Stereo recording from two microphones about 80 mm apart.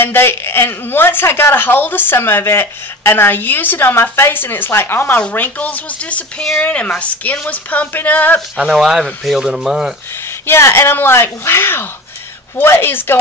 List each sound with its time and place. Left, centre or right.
0.0 s a woman's voice: left
8.5 s speech: centre
10.4 s a woman's voice: left